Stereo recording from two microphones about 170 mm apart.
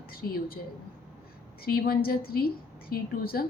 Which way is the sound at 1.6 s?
60° left (ahead or behind).